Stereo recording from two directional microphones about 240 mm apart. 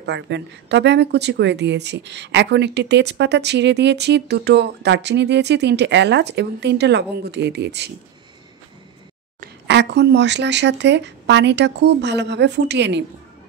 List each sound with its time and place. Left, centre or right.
0.0 s a woman's voice: right
9.4 s a woman's voice: right